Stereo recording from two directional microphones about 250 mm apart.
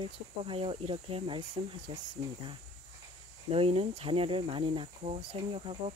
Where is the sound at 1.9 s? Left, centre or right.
Right.